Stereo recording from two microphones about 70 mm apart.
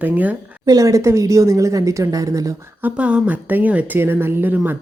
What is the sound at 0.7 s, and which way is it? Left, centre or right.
Speech, right.